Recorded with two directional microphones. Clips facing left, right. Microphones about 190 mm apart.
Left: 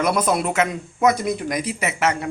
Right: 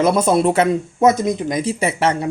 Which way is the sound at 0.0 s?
25° right (ahead or behind).